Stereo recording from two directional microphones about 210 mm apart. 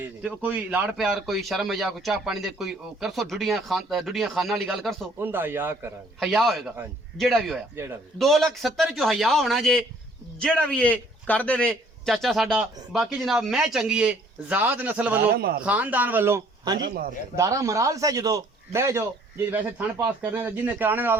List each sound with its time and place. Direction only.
0.0 s a man's voice: 5° right (ahead or behind)
6.1 s a man's voice: centre (ahead or behind)
15.2 s speech: 45° right (ahead or behind)
15.6 s a man's voice: 5° right (ahead or behind)
16.9 s speech: 45° right (ahead or behind)
17.3 s a man's voice: 15° right (ahead or behind)
20.1 s a man's voice: 5° right (ahead or behind)